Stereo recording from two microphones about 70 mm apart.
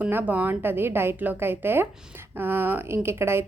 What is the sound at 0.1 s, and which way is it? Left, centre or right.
A woman's voice, right.